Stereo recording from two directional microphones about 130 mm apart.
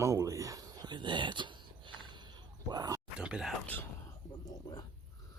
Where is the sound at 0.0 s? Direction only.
25° right (ahead or behind).